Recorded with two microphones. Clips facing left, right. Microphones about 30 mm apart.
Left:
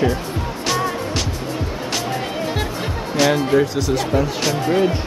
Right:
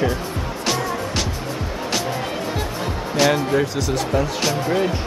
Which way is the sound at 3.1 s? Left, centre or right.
Centre.